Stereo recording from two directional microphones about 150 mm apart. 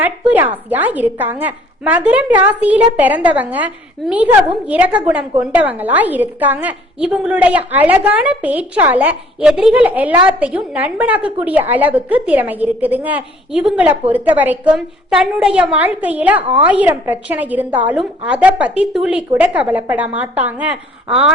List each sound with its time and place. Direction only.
0.0 s a woman's voice: 10° right (ahead or behind)